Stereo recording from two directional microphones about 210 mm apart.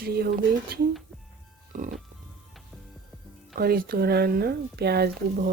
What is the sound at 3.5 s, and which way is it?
Speech, 45° right (ahead or behind).